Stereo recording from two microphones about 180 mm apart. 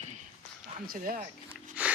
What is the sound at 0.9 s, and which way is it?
Speech, 50° right (ahead or behind).